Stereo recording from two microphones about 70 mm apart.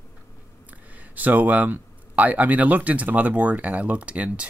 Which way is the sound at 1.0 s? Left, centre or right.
Right.